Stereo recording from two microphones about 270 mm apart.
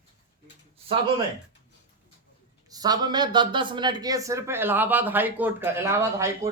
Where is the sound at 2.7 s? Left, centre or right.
Centre.